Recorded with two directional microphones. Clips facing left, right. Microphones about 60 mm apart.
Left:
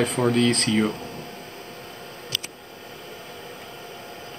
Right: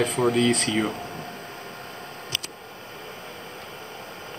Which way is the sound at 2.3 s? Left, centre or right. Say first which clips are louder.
Left 1 dB; right.